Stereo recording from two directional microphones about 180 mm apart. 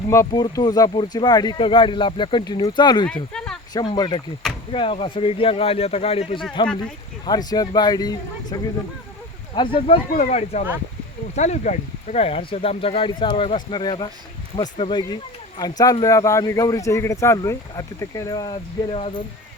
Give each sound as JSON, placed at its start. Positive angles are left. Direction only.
{"t": 0.1, "sound": "speech", "side_deg": 15}
{"t": 3.3, "sound": "a sound", "side_deg": 5}
{"t": 3.7, "sound": "speech", "side_deg": 20}
{"t": 7.3, "sound": "speech", "side_deg": 20}
{"t": 10.1, "sound": "speech", "side_deg": 40}